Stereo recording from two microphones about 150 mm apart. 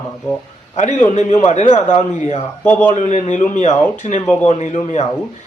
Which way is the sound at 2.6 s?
10° left (ahead or behind).